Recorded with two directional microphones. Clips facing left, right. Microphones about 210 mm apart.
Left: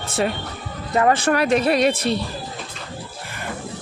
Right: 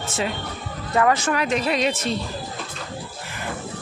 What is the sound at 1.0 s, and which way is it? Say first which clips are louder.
Speech: left 2 dB; 30° left (ahead or behind).